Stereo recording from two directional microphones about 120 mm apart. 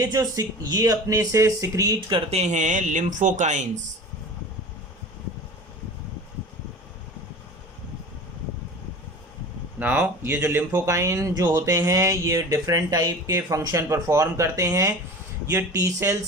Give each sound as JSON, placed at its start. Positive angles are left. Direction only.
{"t": 0.1, "sound": "speech", "side_deg": -35}
{"t": 2.2, "sound": "speech", "side_deg": -65}
{"t": 9.8, "sound": "speech", "side_deg": -15}